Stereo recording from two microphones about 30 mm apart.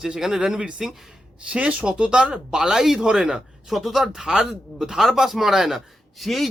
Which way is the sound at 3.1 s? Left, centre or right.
Right.